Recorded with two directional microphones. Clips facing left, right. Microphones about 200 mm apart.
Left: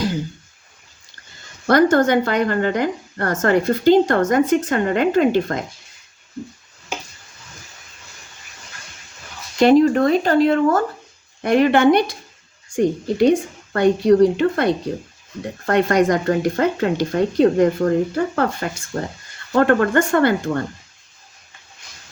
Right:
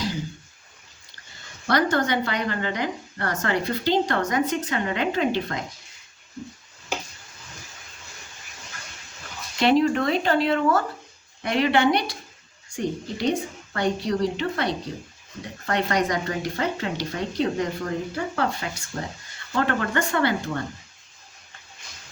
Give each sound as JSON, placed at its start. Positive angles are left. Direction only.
{"t": 1.6, "sound": "a woman's voice", "side_deg": 50}
{"t": 9.6, "sound": "a woman's voice", "side_deg": 45}